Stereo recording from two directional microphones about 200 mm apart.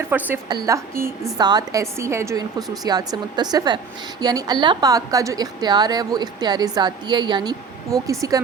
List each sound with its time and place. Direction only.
0.1 s a woman's voice: 10° right (ahead or behind)